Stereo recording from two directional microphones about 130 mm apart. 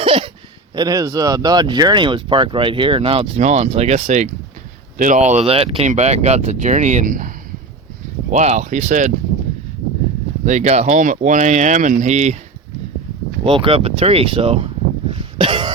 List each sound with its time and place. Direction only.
0.0 s a sound: 45° right (ahead or behind)
0.8 s speech: 30° right (ahead or behind); by 4.3 s 60° right (ahead or behind)
4.9 s speech: 75° right (ahead or behind); by 5.9 s 45° right (ahead or behind)
5.9 s speech: 60° right (ahead or behind); by 7.3 s 90° right
8.3 s speech: 60° right (ahead or behind)
10.4 s speech: 65° right (ahead or behind)
13.4 s speech: 45° right (ahead or behind)
15.4 s throat clearing: 40° right (ahead or behind)